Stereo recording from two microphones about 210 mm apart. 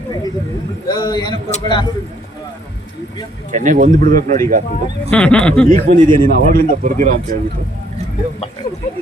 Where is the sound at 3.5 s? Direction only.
35° right (ahead or behind).